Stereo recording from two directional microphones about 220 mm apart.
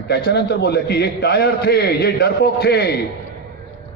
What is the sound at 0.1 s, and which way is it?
A man's voice, 45° left (ahead or behind).